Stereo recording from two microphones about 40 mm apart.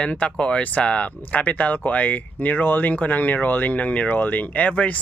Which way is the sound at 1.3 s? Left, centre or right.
Left.